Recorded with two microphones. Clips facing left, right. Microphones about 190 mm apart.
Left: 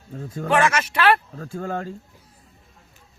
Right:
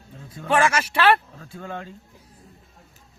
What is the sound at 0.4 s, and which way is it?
Speech, 30° right (ahead or behind).